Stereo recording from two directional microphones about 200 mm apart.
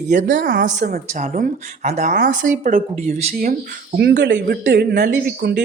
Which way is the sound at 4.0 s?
55° right (ahead or behind).